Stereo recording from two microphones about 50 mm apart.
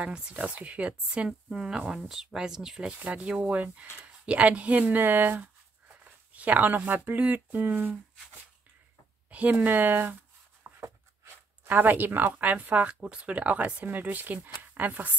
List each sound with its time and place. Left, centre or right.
0.0 s speech: centre
2.9 s speech: right
9.3 s speech: right
9.7 s speech: right
10.6 s a sound: right
11.2 s speech: right